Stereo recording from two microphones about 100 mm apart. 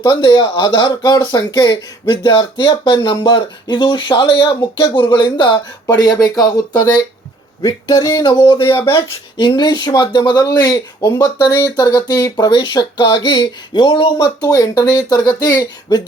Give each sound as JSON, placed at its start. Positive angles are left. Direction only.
{"t": 0.1, "sound": "speech", "side_deg": 50}
{"t": 8.2, "sound": "speech", "side_deg": 55}
{"t": 9.6, "sound": "speech", "side_deg": 50}
{"t": 11.0, "sound": "speech", "side_deg": 35}
{"t": 14.4, "sound": "speech", "side_deg": 35}